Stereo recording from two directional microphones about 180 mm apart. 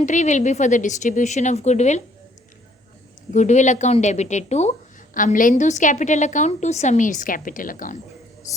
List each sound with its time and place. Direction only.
0.0 s speech: 40° left (ahead or behind)
3.3 s a woman's voice: 40° left (ahead or behind)